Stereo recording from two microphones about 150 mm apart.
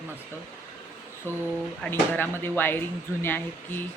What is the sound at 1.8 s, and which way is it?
Speech, 15° left (ahead or behind).